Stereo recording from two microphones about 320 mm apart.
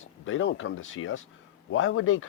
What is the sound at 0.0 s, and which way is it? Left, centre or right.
Speech, left.